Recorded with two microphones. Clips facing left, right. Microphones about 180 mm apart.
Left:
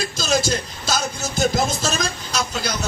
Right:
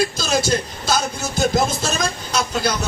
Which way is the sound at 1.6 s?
55° right (ahead or behind).